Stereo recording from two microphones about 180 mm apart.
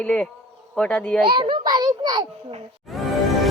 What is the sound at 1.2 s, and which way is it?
A child's voice, 25° right (ahead or behind).